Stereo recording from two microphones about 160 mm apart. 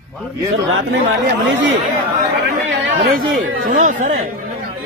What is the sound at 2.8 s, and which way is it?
Speech, 75° right (ahead or behind).